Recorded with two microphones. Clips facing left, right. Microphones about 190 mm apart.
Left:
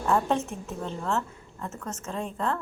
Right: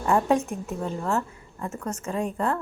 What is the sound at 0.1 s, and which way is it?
A woman's voice, 10° right (ahead or behind).